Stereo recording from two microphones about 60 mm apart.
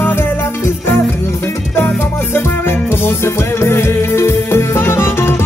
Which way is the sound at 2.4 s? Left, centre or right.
Left.